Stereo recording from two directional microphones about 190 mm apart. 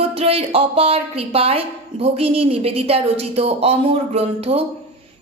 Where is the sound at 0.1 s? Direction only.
30° right (ahead or behind).